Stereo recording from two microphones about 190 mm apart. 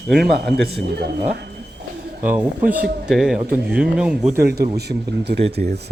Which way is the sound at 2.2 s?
10° right (ahead or behind).